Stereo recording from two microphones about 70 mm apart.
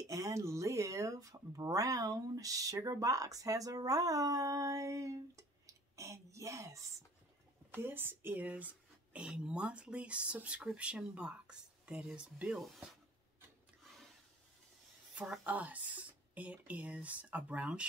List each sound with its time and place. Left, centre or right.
0.0 s speech: right
7.8 s speech: right; by 12.5 s centre
15.4 s speech: right